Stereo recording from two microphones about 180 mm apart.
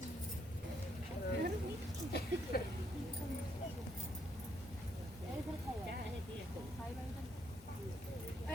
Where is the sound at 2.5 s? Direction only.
60° left (ahead or behind).